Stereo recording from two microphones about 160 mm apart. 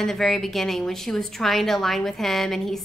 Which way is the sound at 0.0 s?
Centre (ahead or behind).